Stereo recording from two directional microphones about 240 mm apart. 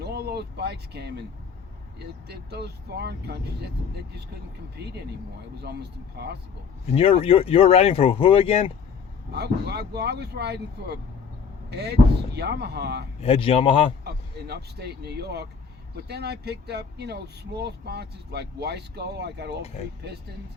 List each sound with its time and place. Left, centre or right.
0.0 s speech: right
2.2 s speech: right
6.9 s speech: left
9.3 s speech: right
13.2 s speech: left
14.0 s speech: right